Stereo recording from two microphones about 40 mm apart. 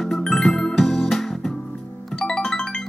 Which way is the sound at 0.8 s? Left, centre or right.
Centre.